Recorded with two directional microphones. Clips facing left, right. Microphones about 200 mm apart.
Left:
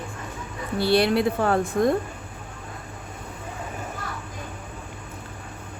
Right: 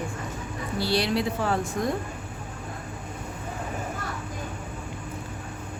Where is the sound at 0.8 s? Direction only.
55° left (ahead or behind).